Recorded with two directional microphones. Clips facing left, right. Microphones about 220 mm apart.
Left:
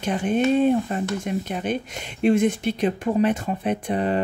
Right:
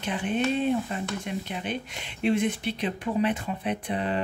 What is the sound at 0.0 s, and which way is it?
Speech, 45° left (ahead or behind).